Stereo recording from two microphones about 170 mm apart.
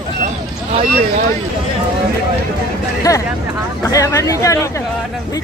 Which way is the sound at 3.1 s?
20° left (ahead or behind).